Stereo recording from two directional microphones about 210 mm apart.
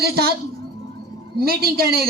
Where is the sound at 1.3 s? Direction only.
45° right (ahead or behind).